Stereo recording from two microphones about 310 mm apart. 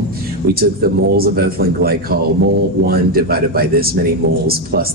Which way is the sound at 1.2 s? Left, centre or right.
Right.